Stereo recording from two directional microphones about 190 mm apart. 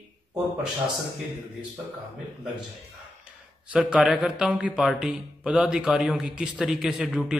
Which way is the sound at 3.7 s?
5° right (ahead or behind).